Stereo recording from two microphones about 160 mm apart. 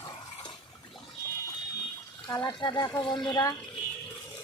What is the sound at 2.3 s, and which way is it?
Speech, 25° left (ahead or behind).